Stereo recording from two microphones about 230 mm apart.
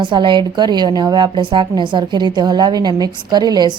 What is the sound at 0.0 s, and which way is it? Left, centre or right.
A woman's voice, right.